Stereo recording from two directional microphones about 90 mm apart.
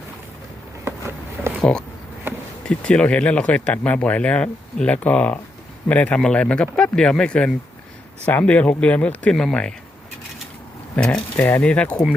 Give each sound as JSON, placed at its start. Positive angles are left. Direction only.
{"t": 0.9, "sound": "a sound", "side_deg": -30}
{"t": 2.6, "sound": "speech", "side_deg": 10}
{"t": 10.9, "sound": "speech", "side_deg": 10}